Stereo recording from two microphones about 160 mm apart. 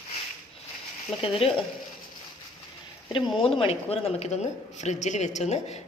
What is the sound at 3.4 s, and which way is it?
A woman's voice, 35° left (ahead or behind).